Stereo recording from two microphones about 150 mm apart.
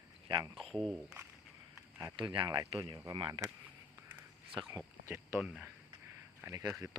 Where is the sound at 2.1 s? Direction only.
30° right (ahead or behind).